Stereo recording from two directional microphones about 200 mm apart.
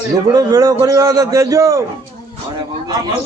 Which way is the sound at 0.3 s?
20° right (ahead or behind).